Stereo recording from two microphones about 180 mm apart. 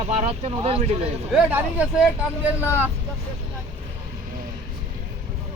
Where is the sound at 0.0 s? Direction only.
35° right (ahead or behind).